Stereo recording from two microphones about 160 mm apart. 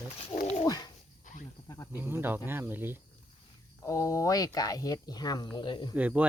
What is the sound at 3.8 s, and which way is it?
Speech, 20° left (ahead or behind).